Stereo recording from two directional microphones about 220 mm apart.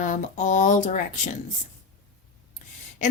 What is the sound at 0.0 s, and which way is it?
Speech, 35° left (ahead or behind).